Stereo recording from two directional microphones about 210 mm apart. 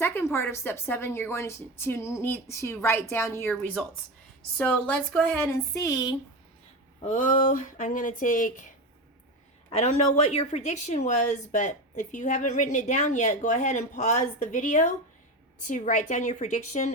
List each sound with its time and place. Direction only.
0.0 s a woman's voice: 10° left (ahead or behind)
7.0 s a woman's voice: 35° left (ahead or behind)
9.6 s a woman's voice: 30° left (ahead or behind)